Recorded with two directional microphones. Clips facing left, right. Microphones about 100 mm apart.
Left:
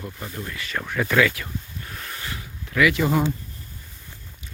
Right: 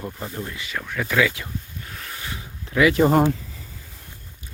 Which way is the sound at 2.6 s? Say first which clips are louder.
Right 2 dB; 30° right (ahead or behind).